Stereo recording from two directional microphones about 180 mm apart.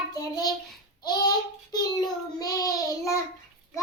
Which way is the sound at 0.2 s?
20° left (ahead or behind).